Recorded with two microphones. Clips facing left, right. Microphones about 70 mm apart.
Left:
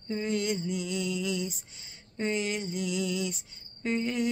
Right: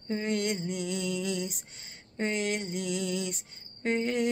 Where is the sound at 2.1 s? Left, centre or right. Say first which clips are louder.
Even; right.